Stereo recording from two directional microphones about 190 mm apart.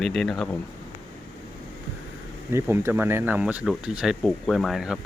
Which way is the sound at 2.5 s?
15° right (ahead or behind).